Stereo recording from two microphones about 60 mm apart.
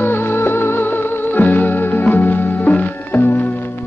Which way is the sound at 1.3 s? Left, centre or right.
Left.